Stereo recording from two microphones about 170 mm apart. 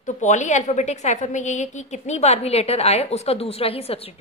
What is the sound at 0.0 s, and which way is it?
A woman's voice, 45° left (ahead or behind).